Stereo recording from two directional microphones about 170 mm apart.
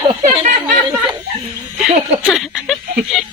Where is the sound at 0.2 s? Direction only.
45° right (ahead or behind).